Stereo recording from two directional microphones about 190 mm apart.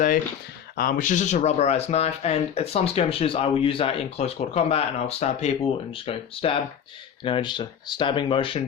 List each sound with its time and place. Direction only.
0.8 s speech: 45° left (ahead or behind); by 8.6 s 30° left (ahead or behind)